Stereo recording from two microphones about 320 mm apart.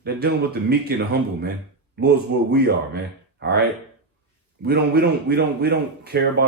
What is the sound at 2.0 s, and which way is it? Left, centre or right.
A man's voice, right.